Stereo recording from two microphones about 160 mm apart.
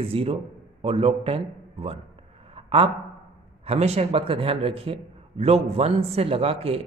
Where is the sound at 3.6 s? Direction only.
40° right (ahead or behind).